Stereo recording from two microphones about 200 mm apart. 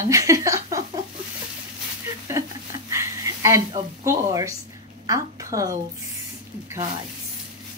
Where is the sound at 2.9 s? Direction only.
15° right (ahead or behind).